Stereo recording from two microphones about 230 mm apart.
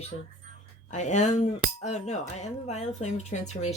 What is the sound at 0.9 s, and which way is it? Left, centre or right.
Cutlery, left.